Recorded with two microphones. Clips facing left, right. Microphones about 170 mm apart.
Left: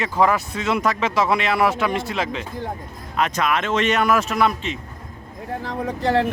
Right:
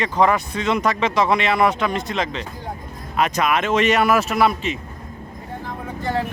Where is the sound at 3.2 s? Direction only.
10° right (ahead or behind).